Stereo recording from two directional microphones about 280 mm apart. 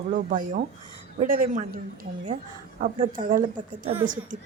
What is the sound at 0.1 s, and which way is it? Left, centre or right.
Speech, right.